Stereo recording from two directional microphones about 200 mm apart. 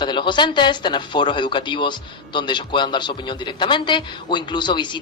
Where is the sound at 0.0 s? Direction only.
25° left (ahead or behind).